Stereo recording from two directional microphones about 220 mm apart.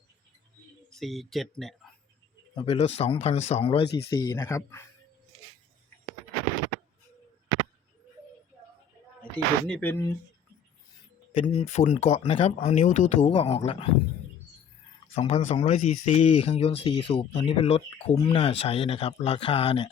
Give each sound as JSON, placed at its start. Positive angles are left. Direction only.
{"t": 0.9, "sound": "speech", "side_deg": 0}
{"t": 2.6, "sound": "speech", "side_deg": 25}
{"t": 3.8, "sound": "speech", "side_deg": 50}
{"t": 4.1, "sound": "speech", "side_deg": 15}
{"t": 9.3, "sound": "speech", "side_deg": 5}
{"t": 11.3, "sound": "speech", "side_deg": 30}
{"t": 15.1, "sound": "speech", "side_deg": 30}